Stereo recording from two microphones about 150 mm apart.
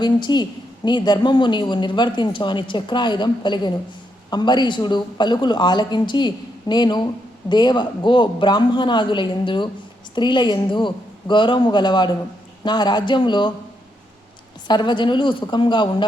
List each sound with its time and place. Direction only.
0.0 s speech: 30° left (ahead or behind)
14.7 s speech: 30° left (ahead or behind)